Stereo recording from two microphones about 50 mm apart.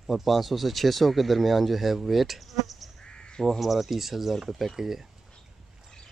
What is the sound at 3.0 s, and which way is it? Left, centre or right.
Crow, centre.